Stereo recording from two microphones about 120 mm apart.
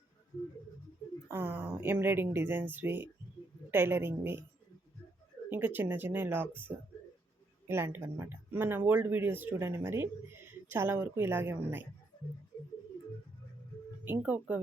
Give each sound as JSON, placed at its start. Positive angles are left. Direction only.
{"t": 1.3, "sound": "speech", "side_deg": -20}
{"t": 5.5, "sound": "speech", "side_deg": -15}
{"t": 14.0, "sound": "speech", "side_deg": -15}